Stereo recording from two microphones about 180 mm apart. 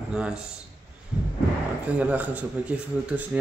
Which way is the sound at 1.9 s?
5° right (ahead or behind).